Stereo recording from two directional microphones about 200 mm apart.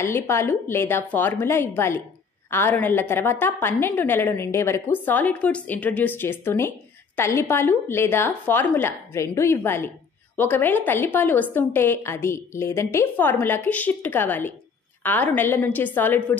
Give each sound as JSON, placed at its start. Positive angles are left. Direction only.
{"t": 0.0, "sound": "a woman's voice", "side_deg": 15}